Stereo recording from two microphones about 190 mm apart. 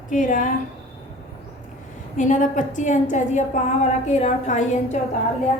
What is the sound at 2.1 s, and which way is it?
A woman's voice, 40° left (ahead or behind).